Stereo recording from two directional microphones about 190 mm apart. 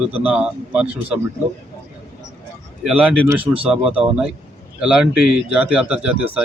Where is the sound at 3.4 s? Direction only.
30° right (ahead or behind).